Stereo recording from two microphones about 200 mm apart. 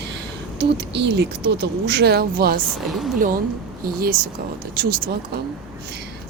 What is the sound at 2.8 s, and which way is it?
Speech, centre (ahead or behind).